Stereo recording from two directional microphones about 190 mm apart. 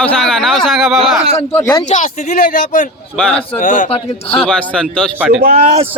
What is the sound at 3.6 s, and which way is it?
Speech, 45° left (ahead or behind).